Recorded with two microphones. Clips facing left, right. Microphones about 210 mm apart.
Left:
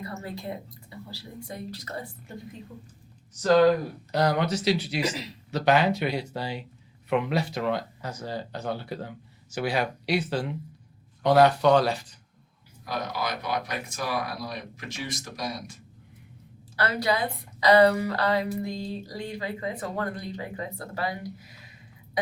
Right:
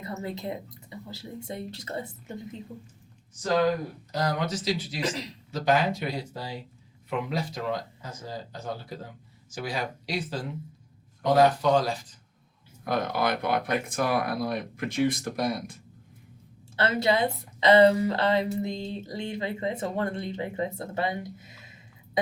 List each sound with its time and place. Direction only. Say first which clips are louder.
0.0 s a woman's voice: right 2 dB; 20° right (ahead or behind)
4.1 s speech: left 4 dB; 65° left (ahead or behind)
5.0 s speech: even; 5° left (ahead or behind)
5.5 s speech: left 2 dB; 70° left (ahead or behind)
12.8 s speech: right 4 dB; 55° right (ahead or behind)
16.7 s a woman's voice: right 2 dB; 25° right (ahead or behind)